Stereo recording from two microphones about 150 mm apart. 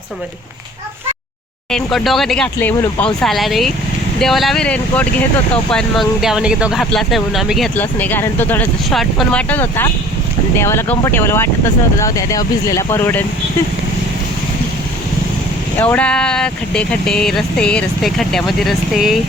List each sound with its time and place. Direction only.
1.7 s speech: centre (ahead or behind)
2.6 s speech: 15° left (ahead or behind)
7.8 s speech: 10° left (ahead or behind)
8.9 s speech: centre (ahead or behind)
15.8 s speech: 10° left (ahead or behind)